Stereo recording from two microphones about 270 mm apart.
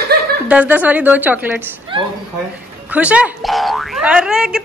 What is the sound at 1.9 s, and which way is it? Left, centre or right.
Speech, centre.